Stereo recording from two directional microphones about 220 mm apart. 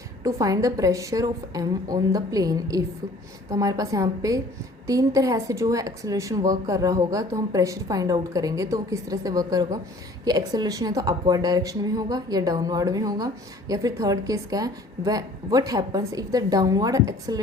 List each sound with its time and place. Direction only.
0.2 s speech: 15° right (ahead or behind)